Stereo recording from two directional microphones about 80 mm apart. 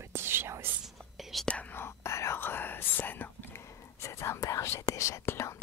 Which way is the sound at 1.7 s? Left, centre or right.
Left.